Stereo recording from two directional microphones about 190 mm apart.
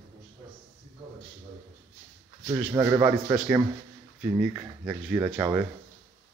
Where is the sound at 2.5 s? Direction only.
15° right (ahead or behind).